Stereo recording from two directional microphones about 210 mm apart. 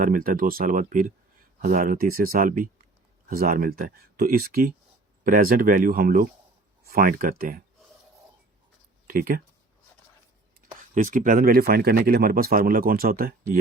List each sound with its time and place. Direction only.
0.0 s speech: 40° right (ahead or behind)
9.0 s speech: 45° right (ahead or behind)
10.9 s speech: 35° right (ahead or behind)